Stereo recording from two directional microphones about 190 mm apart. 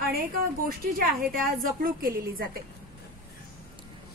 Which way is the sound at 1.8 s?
50° right (ahead or behind).